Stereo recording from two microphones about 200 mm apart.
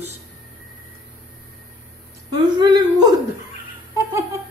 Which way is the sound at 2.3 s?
20° right (ahead or behind).